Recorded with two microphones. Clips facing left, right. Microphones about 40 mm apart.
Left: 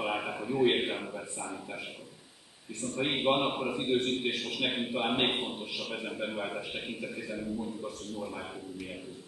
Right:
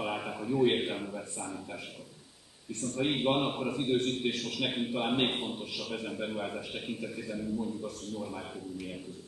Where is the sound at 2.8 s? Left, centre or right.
Centre.